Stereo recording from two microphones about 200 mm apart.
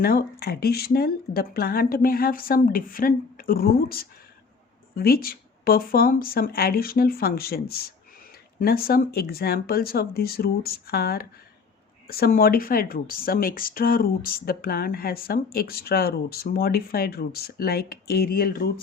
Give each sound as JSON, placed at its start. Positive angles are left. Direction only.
{"t": 0.0, "sound": "speech", "side_deg": 50}